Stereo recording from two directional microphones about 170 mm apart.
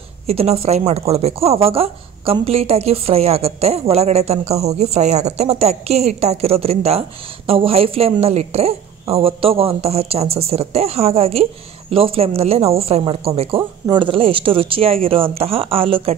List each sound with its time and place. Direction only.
0.3 s speech: 35° right (ahead or behind)